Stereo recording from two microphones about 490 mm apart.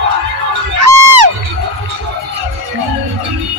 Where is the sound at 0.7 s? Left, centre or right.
Right.